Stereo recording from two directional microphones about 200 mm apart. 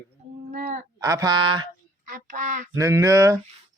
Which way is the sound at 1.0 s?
15° right (ahead or behind).